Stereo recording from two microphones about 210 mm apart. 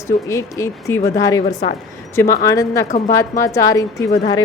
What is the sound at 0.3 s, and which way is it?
Speech, 15° left (ahead or behind).